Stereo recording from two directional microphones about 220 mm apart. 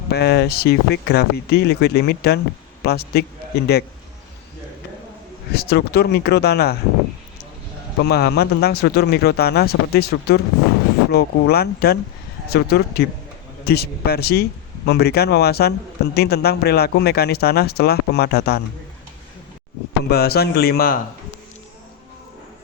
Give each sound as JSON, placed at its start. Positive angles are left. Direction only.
{"t": 0.1, "sound": "speech", "side_deg": 45}
{"t": 5.5, "sound": "speech", "side_deg": 45}
{"t": 8.0, "sound": "speech", "side_deg": 45}
{"t": 20.1, "sound": "speech", "side_deg": 45}